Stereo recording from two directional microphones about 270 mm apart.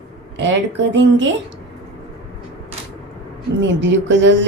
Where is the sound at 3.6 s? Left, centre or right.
Right.